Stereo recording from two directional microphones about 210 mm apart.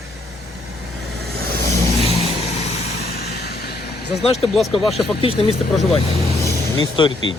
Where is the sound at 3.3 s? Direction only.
50° left (ahead or behind).